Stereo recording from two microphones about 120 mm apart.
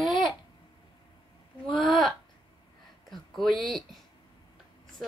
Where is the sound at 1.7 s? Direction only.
Centre (ahead or behind).